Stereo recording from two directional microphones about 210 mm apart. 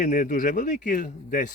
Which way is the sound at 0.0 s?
40° left (ahead or behind).